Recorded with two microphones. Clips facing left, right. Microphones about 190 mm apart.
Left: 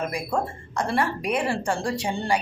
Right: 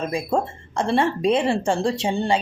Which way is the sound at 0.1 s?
25° right (ahead or behind).